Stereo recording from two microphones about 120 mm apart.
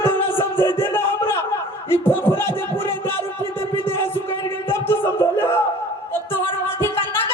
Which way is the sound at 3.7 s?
20° left (ahead or behind).